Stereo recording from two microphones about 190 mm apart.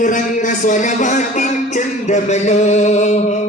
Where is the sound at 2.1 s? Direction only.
35° left (ahead or behind).